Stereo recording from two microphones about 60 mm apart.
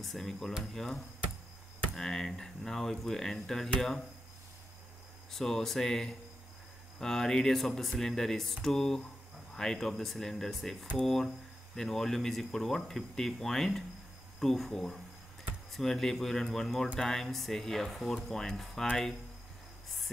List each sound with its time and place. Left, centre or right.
0.0 s speech: centre
5.3 s speech: centre